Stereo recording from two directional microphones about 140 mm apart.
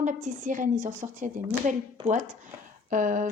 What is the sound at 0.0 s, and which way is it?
A woman's voice, 65° right (ahead or behind).